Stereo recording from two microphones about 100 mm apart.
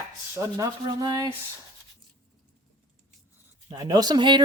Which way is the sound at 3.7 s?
40° right (ahead or behind).